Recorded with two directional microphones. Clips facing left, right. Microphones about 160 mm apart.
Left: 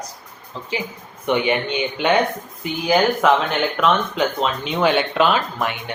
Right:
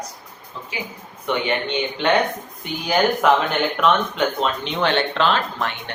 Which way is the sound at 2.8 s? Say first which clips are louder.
Left 1 dB; centre (ahead or behind).